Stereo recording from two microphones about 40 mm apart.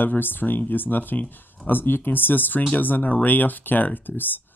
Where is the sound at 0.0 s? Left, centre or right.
Left.